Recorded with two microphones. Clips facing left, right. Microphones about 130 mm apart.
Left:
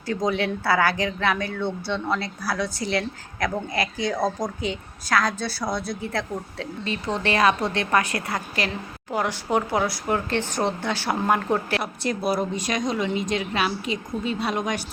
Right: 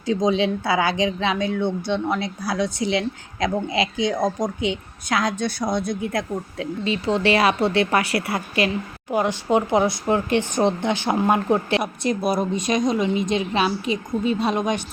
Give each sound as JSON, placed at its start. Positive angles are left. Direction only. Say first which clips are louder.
{"t": 0.0, "sound": "speech", "louder": "right 4 dB", "side_deg": -20}
{"t": 7.0, "sound": "a woman's voice", "louder": "right 2 dB", "side_deg": -30}
{"t": 9.1, "sound": "speech", "louder": "right 4 dB", "side_deg": -20}